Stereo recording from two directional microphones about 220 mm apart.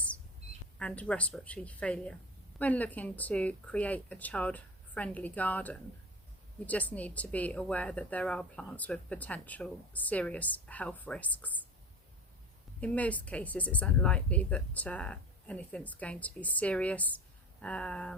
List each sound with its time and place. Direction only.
0.8 s a woman's voice: 5° left (ahead or behind)
12.8 s a woman's voice: 5° left (ahead or behind)